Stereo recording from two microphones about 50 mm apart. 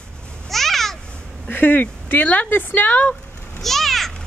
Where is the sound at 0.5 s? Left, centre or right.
Centre.